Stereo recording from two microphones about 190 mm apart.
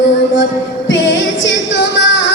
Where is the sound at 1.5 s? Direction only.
70° left (ahead or behind).